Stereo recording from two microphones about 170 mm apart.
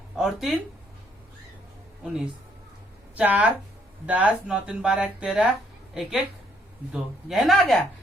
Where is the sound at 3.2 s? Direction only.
10° right (ahead or behind).